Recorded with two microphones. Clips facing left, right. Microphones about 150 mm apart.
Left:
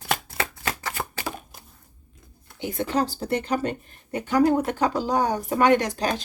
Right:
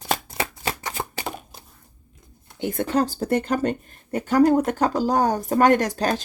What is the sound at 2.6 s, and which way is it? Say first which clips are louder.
Speech: right 3 dB; 55° right (ahead or behind).